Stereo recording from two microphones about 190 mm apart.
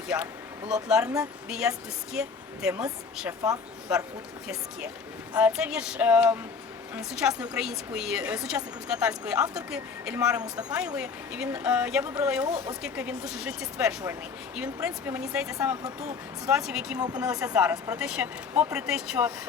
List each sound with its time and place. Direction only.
0.7 s a woman's voice: 5° right (ahead or behind)
3.4 s a woman's voice: 5° right (ahead or behind)
5.3 s a woman's voice: 5° right (ahead or behind)